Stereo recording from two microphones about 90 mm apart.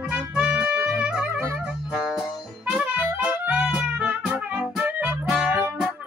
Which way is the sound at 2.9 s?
20° right (ahead or behind).